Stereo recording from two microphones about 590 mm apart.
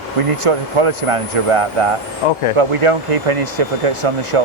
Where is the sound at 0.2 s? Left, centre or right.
Right.